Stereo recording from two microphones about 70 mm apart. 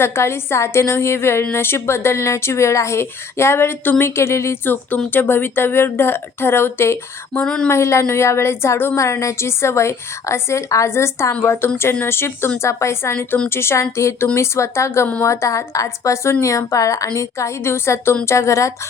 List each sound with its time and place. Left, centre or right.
0.0 s a woman's voice: left
5.1 s a woman's voice: left
7.4 s a woman's voice: centre
7.7 s a woman's voice: left
13.1 s a woman's voice: centre
13.5 s a woman's voice: left